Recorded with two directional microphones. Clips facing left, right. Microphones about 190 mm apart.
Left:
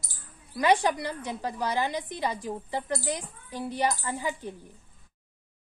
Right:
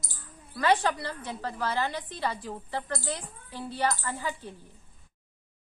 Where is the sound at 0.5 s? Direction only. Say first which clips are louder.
Left 2 dB; 15° left (ahead or behind).